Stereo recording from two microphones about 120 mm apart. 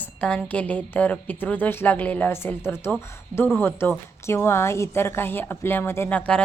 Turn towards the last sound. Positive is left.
turn(degrees=10)  # may be behind; listen again after turning